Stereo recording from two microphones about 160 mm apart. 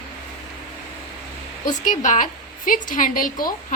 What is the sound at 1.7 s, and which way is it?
A woman's voice, 50° left (ahead or behind).